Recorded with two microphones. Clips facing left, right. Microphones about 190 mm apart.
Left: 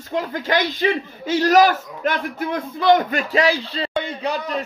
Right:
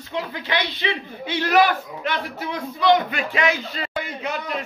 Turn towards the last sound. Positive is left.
turn(degrees=35)  # may be behind; listen again after turning